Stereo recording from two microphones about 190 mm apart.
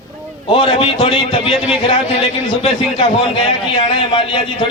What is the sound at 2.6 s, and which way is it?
A man's voice, 30° left (ahead or behind).